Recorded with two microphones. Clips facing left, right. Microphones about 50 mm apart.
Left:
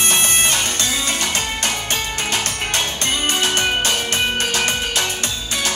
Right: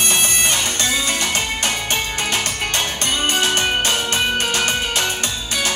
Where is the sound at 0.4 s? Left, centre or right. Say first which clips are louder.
Even; right.